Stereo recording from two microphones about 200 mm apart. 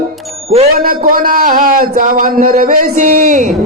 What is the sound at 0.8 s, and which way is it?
Speech, 45° right (ahead or behind).